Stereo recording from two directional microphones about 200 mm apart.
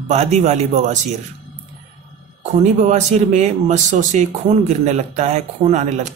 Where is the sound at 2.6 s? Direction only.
35° right (ahead or behind).